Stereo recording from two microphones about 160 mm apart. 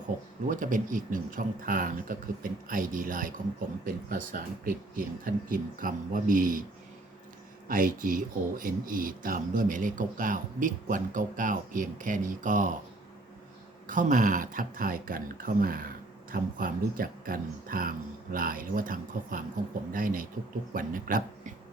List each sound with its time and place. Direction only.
0.4 s speech: 55° right (ahead or behind)
7.7 s speech: 60° right (ahead or behind)
13.8 s speech: 55° right (ahead or behind)